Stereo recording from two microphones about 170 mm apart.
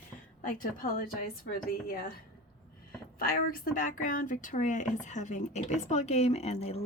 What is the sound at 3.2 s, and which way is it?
A woman's voice, 55° left (ahead or behind).